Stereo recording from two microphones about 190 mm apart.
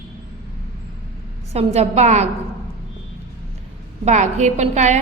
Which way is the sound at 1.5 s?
35° right (ahead or behind).